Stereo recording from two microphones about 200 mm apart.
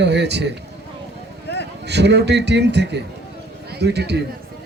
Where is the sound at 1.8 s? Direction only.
60° right (ahead or behind).